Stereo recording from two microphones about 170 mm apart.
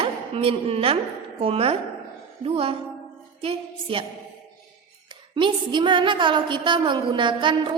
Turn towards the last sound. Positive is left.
turn(degrees=-30)  # may be behind; listen again after turning